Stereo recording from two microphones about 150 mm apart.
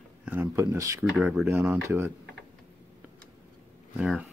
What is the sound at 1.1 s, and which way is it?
Speech, centre (ahead or behind).